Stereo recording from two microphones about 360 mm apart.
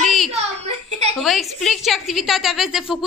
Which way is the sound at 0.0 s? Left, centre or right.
Centre.